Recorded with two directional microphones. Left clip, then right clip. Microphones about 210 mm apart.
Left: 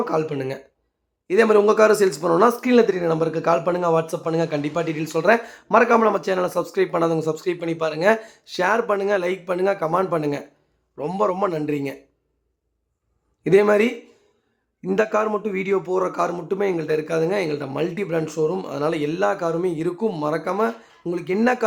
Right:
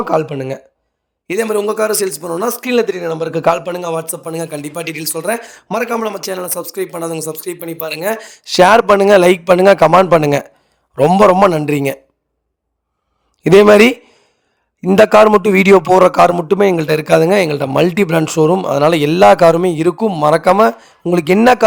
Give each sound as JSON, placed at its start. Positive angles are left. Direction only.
{"t": 0.0, "sound": "speech", "side_deg": -35}
{"t": 1.4, "sound": "speech", "side_deg": 0}
{"t": 2.5, "sound": "a man's voice", "side_deg": -45}
{"t": 4.1, "sound": "speech", "side_deg": 0}
{"t": 5.5, "sound": "a man's voice", "side_deg": -45}
{"t": 5.7, "sound": "speech", "side_deg": 0}
{"t": 8.2, "sound": "a man's voice", "side_deg": -50}
{"t": 13.4, "sound": "a man's voice", "side_deg": -50}